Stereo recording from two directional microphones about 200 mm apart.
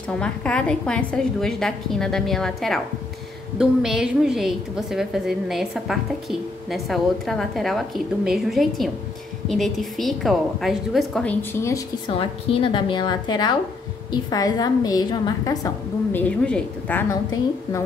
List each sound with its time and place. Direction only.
0.2 s a woman's voice: 5° left (ahead or behind)
12.1 s a woman's voice: 25° left (ahead or behind); by 17.2 s 10° left (ahead or behind)